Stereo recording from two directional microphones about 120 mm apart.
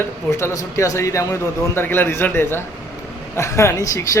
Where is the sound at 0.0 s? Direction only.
20° left (ahead or behind).